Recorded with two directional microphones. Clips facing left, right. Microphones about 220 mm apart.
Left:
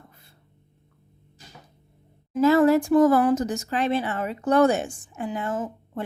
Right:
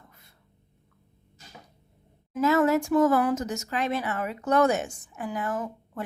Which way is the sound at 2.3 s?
30° left (ahead or behind).